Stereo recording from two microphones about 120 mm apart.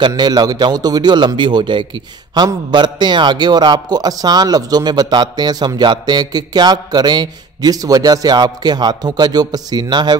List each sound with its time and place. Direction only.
0.0 s a man's voice: 35° right (ahead or behind)